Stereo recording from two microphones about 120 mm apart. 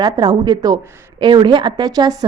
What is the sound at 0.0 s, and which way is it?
A woman's voice, 35° right (ahead or behind).